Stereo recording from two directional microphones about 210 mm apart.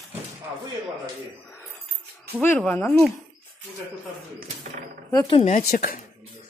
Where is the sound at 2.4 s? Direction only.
5° left (ahead or behind).